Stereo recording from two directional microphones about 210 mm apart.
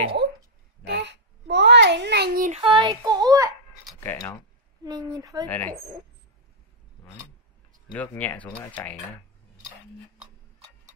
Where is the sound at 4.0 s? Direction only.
15° left (ahead or behind).